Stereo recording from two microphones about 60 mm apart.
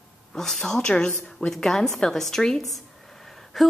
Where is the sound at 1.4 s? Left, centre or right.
Centre.